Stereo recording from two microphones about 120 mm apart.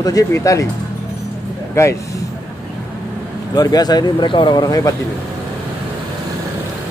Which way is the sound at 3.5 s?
35° left (ahead or behind).